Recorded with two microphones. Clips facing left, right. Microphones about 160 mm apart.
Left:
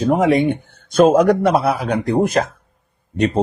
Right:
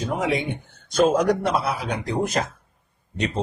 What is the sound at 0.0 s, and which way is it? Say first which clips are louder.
Speech: left 10 dB; 55° left (ahead or behind).